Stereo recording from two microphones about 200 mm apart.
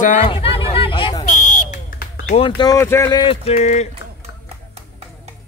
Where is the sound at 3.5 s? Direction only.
35° left (ahead or behind).